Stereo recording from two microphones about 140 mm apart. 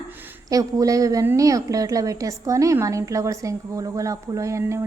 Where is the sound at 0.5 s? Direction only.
25° right (ahead or behind).